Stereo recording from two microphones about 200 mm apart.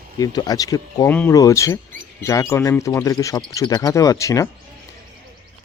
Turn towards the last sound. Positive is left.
turn(degrees=15)  # may be behind; listen again after turning